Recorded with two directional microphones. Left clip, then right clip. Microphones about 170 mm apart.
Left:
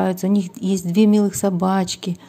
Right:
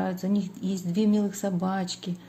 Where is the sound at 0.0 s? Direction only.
40° left (ahead or behind).